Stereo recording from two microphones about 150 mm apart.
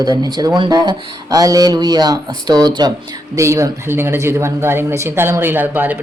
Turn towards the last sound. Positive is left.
turn(degrees=-15)  # may be behind; listen again after turning